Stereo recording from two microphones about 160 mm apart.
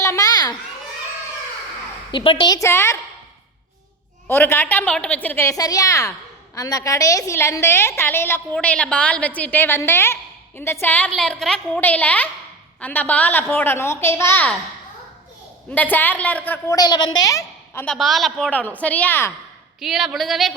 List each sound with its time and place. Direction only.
0.0 s children playing: 20° left (ahead or behind)
2.1 s a woman's voice: 30° left (ahead or behind); by 3.0 s 15° left (ahead or behind)
4.3 s a woman's voice: 15° left (ahead or behind)
15.7 s a woman's voice: 10° left (ahead or behind)
16.7 s a woman's voice: 25° left (ahead or behind)
17.8 s a woman's voice: centre (ahead or behind)
19.8 s speech: centre (ahead or behind)